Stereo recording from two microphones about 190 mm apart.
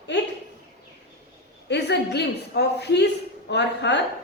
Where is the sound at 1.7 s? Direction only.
60° left (ahead or behind).